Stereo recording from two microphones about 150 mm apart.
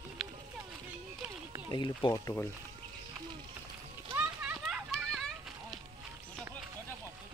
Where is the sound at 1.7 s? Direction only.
30° left (ahead or behind).